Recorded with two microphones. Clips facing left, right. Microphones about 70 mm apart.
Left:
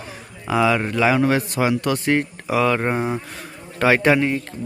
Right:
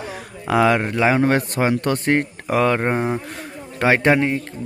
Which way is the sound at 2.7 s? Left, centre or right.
Right.